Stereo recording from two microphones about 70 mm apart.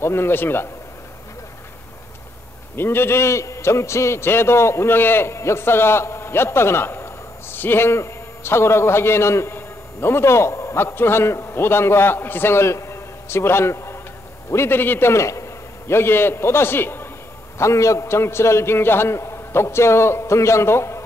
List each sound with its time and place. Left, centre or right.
0.0 s a man's voice: left
2.7 s a man's voice: left
15.9 s a man's voice: left
17.6 s a man's voice: left